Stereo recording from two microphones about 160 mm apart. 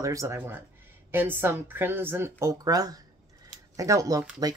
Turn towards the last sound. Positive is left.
turn(degrees=-25)  # may be behind; listen again after turning